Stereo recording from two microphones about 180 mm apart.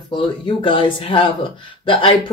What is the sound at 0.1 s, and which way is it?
Speech, 30° left (ahead or behind).